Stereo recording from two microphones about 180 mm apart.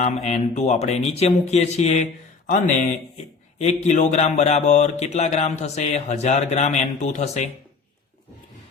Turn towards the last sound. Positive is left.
turn(degrees=40)  # may be behind; listen again after turning